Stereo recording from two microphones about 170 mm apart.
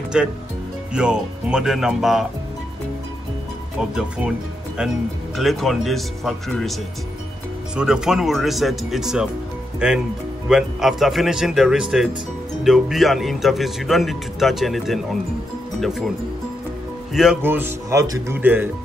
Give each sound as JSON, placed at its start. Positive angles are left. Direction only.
{"t": 0.1, "sound": "speech", "side_deg": -5}
{"t": 4.7, "sound": "speech", "side_deg": 0}
{"t": 17.1, "sound": "speech", "side_deg": -5}